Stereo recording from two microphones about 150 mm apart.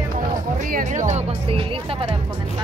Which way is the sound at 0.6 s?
60° right (ahead or behind).